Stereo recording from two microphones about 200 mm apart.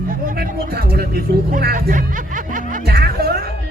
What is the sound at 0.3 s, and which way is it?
Speech, 45° right (ahead or behind).